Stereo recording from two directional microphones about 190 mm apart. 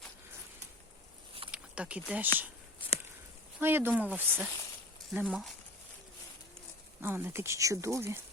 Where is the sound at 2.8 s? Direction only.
25° left (ahead or behind).